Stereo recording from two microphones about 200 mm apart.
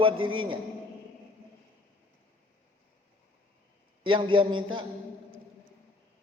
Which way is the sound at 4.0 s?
25° right (ahead or behind).